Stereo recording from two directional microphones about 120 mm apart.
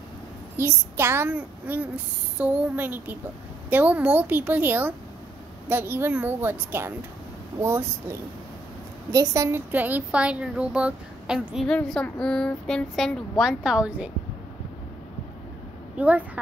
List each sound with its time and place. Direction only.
0.6 s a child's voice: 20° right (ahead or behind)
9.7 s speech: 15° right (ahead or behind)
16.0 s a child's voice: 10° right (ahead or behind)